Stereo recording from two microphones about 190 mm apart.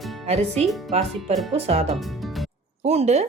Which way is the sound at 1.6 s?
30° right (ahead or behind).